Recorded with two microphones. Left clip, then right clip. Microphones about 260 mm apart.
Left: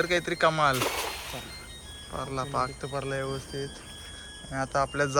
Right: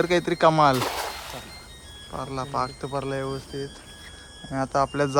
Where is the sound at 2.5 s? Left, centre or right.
Centre.